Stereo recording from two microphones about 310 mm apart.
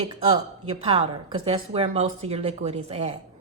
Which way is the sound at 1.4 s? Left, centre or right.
Centre.